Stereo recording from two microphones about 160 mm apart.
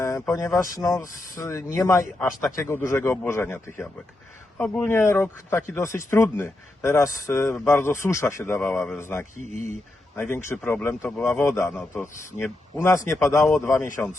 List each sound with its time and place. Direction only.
0.3 s speech: 20° left (ahead or behind)
9.4 s speech: 50° right (ahead or behind)
10.2 s speech: 15° left (ahead or behind)